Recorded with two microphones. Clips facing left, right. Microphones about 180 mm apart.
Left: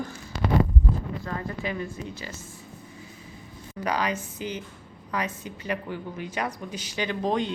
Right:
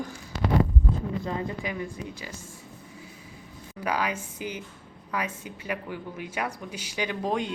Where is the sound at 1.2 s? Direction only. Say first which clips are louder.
Right 1 dB; 20° right (ahead or behind).